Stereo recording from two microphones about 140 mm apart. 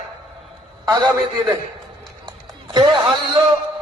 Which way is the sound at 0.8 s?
30° right (ahead or behind).